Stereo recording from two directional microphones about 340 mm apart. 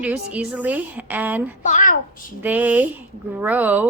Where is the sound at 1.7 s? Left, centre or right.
Left.